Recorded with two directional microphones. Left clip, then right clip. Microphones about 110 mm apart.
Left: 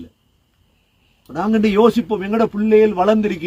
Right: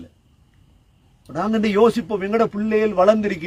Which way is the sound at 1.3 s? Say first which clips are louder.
Left 2 dB; 40° right (ahead or behind).